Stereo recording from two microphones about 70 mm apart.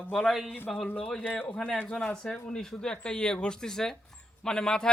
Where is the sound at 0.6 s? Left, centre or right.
Centre.